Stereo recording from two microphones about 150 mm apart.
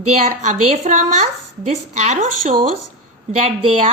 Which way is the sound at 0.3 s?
50° right (ahead or behind).